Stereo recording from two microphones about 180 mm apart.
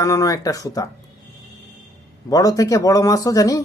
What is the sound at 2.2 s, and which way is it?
Speech, 20° left (ahead or behind).